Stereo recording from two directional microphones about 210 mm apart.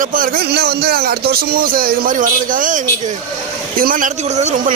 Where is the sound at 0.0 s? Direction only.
40° right (ahead or behind).